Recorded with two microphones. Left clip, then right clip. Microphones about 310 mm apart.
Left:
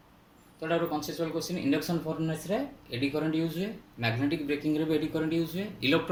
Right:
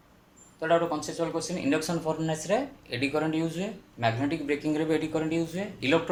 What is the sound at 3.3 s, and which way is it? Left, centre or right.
Speech, right.